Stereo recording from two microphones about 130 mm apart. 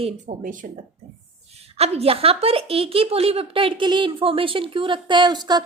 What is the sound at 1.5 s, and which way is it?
A woman's voice, 55° right (ahead or behind).